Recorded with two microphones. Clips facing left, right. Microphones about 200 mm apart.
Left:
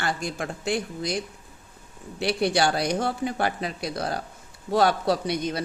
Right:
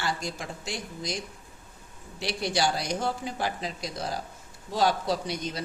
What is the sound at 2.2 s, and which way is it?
A man's voice, 60° left (ahead or behind).